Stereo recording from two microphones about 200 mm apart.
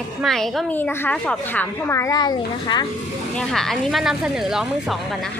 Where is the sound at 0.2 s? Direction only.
Centre (ahead or behind); by 2.8 s 20° left (ahead or behind).